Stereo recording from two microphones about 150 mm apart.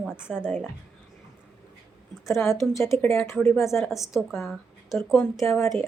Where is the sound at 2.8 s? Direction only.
15° left (ahead or behind).